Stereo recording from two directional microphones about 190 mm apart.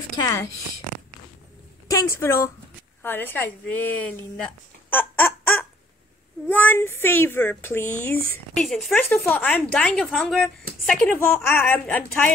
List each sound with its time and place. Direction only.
0.2 s speech: 20° left (ahead or behind)
1.9 s speech: 15° left (ahead or behind)